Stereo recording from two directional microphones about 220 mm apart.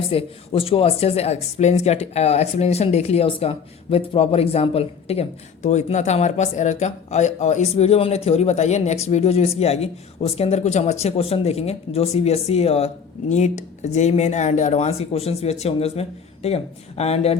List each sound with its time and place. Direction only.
0.1 s speech: 25° left (ahead or behind)